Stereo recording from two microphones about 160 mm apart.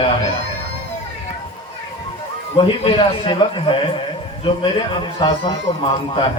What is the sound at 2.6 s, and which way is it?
A man's voice, 35° left (ahead or behind).